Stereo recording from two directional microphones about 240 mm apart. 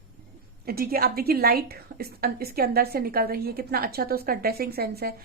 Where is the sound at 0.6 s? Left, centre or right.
Right.